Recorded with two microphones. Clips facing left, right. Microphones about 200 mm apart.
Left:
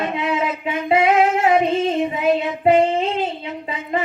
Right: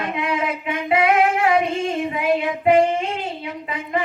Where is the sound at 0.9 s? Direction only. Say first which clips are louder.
Left 1 dB; 25° left (ahead or behind).